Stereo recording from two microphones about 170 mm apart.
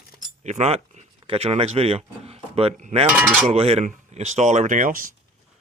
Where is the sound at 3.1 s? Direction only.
5° right (ahead or behind).